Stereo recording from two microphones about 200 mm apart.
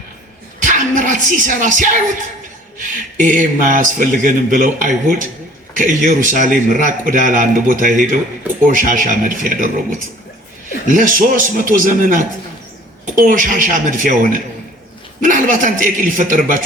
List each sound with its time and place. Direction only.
0.7 s speech: 40° right (ahead or behind)
10.8 s speech: 40° right (ahead or behind)